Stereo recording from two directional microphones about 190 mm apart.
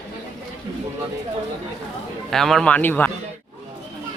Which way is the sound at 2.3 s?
Centre (ahead or behind).